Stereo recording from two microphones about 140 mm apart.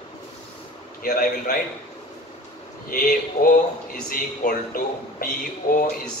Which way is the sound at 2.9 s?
90° left.